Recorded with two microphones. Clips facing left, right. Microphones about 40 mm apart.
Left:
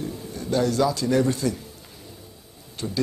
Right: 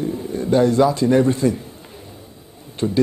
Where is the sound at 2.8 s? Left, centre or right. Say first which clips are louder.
Right 10 dB; right.